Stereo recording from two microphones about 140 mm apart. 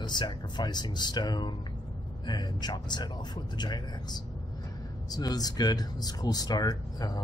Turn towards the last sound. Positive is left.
turn(degrees=30)  # may be behind; listen again after turning